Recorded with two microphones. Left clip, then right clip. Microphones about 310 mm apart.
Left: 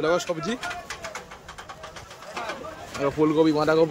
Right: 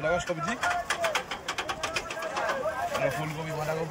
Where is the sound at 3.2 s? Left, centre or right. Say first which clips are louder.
Left 14 dB; left.